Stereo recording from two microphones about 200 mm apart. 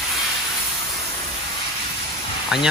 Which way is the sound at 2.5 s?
Centre (ahead or behind).